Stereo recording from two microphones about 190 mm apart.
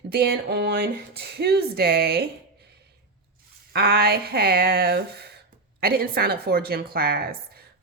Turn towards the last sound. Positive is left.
turn(degrees=-50)  # may be behind; listen again after turning